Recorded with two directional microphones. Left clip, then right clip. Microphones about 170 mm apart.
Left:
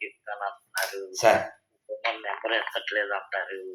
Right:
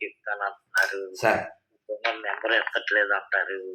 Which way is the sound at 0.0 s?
65° right (ahead or behind).